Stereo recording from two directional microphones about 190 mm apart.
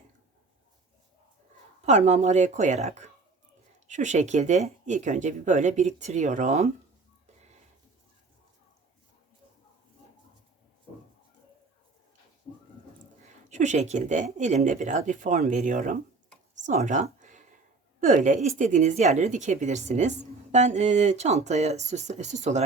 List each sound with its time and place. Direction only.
1.8 s a woman's voice: 35° right (ahead or behind)
13.5 s a woman's voice: 40° right (ahead or behind)